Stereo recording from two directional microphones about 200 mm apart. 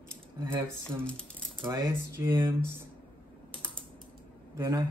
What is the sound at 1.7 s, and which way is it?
Mantra, 15° right (ahead or behind).